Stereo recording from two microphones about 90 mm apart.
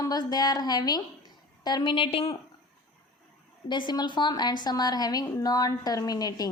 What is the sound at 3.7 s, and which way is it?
A woman's voice, 55° left (ahead or behind).